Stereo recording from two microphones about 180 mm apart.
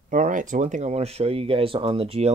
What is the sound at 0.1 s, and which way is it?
Speech, 45° right (ahead or behind).